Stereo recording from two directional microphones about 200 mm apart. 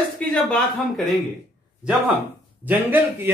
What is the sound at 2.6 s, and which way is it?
Speech, 10° right (ahead or behind).